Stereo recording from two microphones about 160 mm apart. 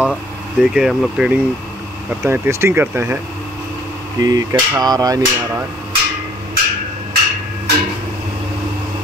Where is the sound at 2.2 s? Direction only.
15° right (ahead or behind).